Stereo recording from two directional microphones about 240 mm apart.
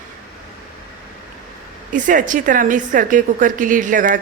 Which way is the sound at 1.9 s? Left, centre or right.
Right.